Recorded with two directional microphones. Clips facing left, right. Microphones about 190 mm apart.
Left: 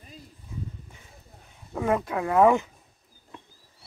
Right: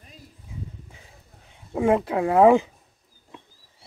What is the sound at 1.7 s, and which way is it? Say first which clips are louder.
Speech: right 5 dB; 25° right (ahead or behind).